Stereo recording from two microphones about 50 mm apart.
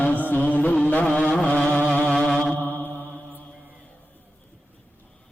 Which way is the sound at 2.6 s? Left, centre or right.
Left.